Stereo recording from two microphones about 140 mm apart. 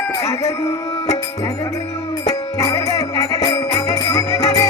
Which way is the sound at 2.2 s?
25° left (ahead or behind).